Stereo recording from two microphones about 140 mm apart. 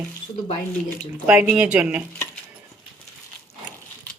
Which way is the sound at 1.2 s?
10° right (ahead or behind).